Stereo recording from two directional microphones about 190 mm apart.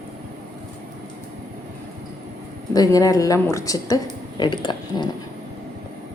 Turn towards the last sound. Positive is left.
turn(degrees=25)  # may be behind; listen again after turning